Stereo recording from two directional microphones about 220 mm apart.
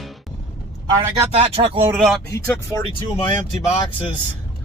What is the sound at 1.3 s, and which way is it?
Speech, 25° right (ahead or behind).